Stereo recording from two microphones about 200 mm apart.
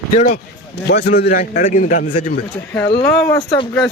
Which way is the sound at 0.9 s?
50° left (ahead or behind).